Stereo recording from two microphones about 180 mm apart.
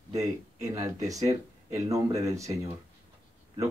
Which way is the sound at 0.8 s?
20° right (ahead or behind).